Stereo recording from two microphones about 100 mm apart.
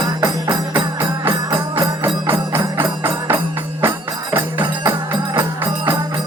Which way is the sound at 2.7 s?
25° right (ahead or behind).